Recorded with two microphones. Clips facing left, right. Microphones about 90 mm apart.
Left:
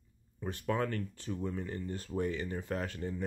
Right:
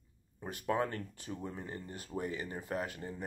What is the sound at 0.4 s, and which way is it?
Speech, 20° right (ahead or behind).